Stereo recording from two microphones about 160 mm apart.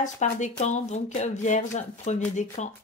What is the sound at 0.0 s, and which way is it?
Speech, 50° left (ahead or behind).